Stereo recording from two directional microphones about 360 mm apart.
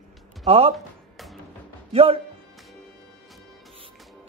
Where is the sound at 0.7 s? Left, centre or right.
Centre.